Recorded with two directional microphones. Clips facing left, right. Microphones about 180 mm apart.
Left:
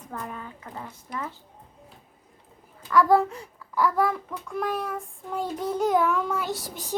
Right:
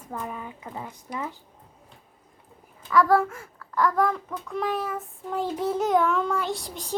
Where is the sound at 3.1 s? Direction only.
20° left (ahead or behind).